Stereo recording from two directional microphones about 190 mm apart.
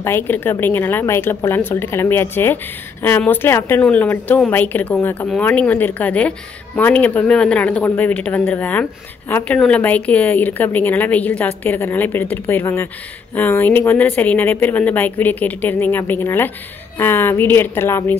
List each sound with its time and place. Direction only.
0.0 s a woman's voice: 10° left (ahead or behind)